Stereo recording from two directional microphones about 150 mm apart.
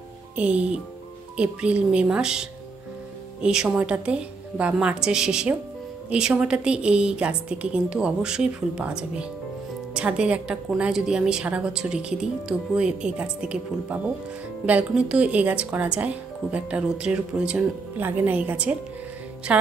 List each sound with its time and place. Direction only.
0.4 s a woman's voice: 10° right (ahead or behind)